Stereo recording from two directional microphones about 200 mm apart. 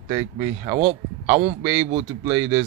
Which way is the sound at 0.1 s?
20° right (ahead or behind).